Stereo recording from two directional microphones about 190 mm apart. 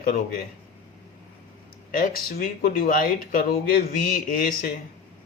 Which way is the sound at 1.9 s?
50° left (ahead or behind).